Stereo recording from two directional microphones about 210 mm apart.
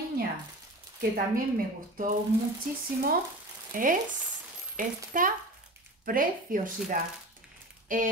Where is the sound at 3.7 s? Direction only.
40° right (ahead or behind).